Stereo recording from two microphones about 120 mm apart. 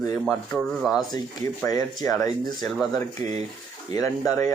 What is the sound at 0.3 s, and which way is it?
Speech, 5° left (ahead or behind).